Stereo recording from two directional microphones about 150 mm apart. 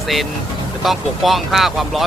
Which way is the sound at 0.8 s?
Centre (ahead or behind).